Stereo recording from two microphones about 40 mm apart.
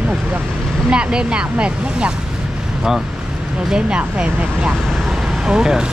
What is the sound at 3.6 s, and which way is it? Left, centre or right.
Speech, centre.